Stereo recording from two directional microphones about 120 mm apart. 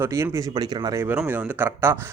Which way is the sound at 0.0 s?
25° right (ahead or behind).